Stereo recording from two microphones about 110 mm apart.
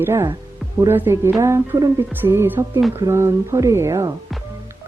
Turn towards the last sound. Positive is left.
turn(degrees=-30)  # may be behind; listen again after turning